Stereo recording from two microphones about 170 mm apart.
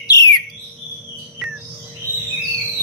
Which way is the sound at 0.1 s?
20° left (ahead or behind).